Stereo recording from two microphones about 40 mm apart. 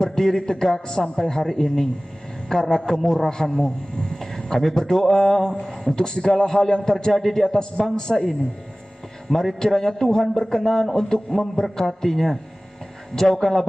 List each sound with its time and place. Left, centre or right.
0.0 s a man's voice: centre
9.3 s speech: centre